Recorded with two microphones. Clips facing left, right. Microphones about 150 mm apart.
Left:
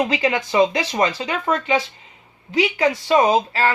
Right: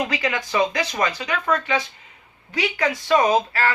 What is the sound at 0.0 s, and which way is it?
A woman's voice, 25° left (ahead or behind).